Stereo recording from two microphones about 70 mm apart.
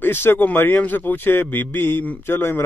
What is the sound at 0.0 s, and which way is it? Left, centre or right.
Speech, left.